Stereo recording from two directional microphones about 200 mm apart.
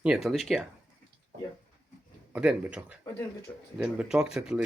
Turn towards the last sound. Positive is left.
turn(degrees=-5)  # may be behind; listen again after turning